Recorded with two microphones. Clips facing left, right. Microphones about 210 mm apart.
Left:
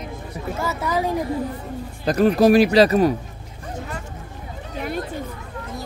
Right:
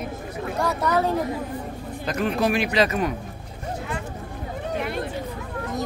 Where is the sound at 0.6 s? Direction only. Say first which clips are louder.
Right 1 dB; 5° left (ahead or behind).